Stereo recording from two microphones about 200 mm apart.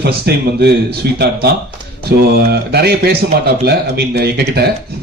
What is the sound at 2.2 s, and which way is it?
Speech, 50° right (ahead or behind).